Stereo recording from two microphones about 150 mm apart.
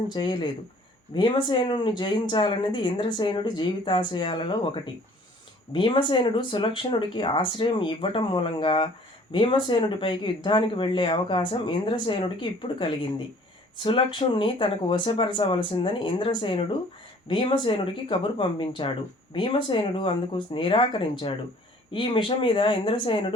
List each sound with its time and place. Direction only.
0.1 s speech: 30° left (ahead or behind)